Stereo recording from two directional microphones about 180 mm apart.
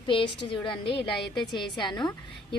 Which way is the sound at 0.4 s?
30° left (ahead or behind).